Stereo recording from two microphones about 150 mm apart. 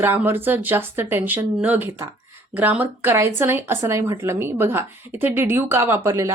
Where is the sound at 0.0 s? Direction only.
15° right (ahead or behind).